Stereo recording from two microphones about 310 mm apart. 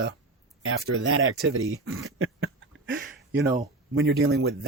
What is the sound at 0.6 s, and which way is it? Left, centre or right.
Speech, right.